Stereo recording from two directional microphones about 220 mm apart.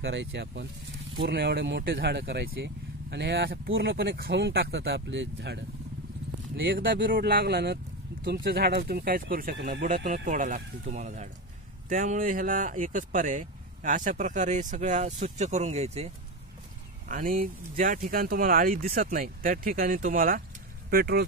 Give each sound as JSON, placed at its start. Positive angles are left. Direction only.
{"t": 0.0, "sound": "speech", "side_deg": -50}
{"t": 7.1, "sound": "speech", "side_deg": -45}
{"t": 17.1, "sound": "speech", "side_deg": -40}